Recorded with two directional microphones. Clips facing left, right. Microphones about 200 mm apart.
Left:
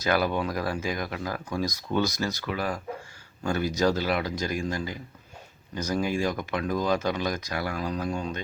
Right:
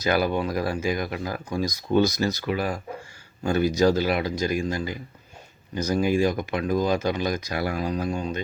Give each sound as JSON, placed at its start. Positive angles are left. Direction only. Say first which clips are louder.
{"t": 0.0, "sound": "speech", "louder": "right 2 dB", "side_deg": -5}
{"t": 3.8, "sound": "speech", "louder": "right 2 dB", "side_deg": -5}